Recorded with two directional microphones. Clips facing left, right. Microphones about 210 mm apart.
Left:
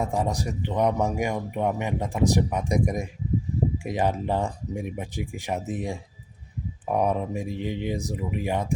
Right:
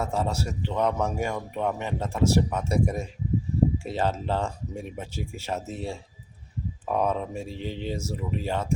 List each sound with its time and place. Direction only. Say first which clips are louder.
0.0 s speech: left 1 dB; 15° left (ahead or behind)